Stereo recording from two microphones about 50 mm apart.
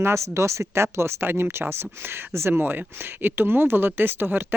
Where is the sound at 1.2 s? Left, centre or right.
Right.